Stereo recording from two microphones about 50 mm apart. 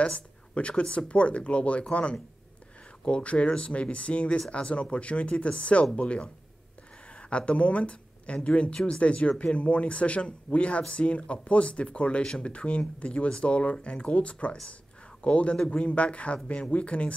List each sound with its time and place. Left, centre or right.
0.0 s speech: centre
15.9 s speech: left